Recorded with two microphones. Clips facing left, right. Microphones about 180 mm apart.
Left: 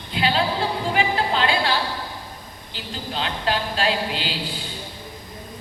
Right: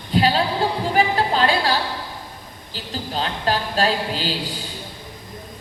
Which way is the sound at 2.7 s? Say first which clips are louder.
Right 3 dB; 40° right (ahead or behind).